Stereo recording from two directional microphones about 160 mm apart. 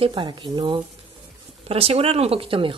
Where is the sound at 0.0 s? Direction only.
30° right (ahead or behind).